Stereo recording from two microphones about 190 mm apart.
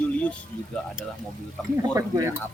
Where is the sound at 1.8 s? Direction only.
15° right (ahead or behind).